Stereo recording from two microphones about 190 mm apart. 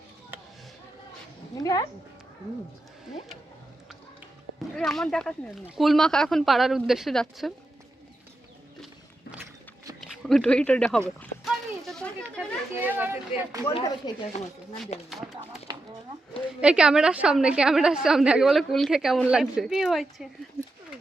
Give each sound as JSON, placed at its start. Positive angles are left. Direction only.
{"t": 1.5, "sound": "speech", "side_deg": 20}
{"t": 4.7, "sound": "a woman's voice", "side_deg": 0}
{"t": 10.0, "sound": "speech", "side_deg": 0}
{"t": 11.2, "sound": "a sound", "side_deg": 0}
{"t": 12.8, "sound": "speech", "side_deg": -10}
{"t": 14.0, "sound": "speech", "side_deg": 20}
{"t": 15.1, "sound": "a woman's voice", "side_deg": 0}